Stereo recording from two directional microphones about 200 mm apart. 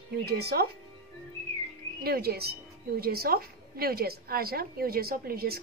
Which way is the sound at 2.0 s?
50° right (ahead or behind).